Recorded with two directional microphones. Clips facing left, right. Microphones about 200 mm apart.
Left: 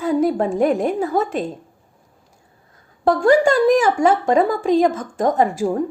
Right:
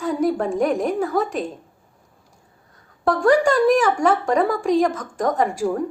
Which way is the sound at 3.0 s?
25° left (ahead or behind).